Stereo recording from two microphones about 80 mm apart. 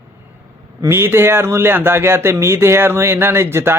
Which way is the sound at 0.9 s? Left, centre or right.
Right.